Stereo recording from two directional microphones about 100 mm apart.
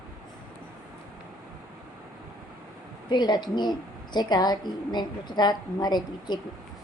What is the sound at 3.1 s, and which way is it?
A woman's voice, 45° left (ahead or behind).